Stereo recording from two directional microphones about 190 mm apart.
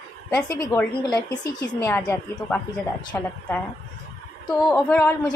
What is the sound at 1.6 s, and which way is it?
Speech, 15° left (ahead or behind).